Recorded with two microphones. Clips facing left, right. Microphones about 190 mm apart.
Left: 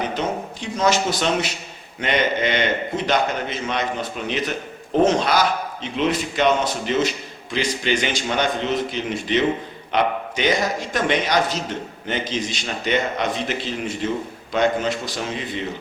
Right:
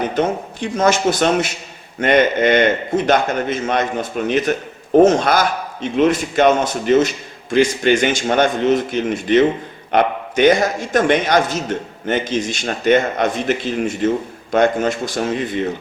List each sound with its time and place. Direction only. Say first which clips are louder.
0.2 s a man's voice: right 6 dB; 50° right (ahead or behind)